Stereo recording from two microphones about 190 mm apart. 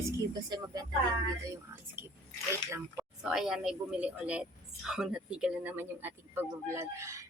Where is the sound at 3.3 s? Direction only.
5° right (ahead or behind).